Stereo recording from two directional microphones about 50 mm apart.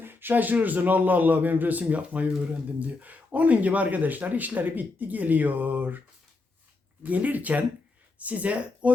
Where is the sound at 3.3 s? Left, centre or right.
Right.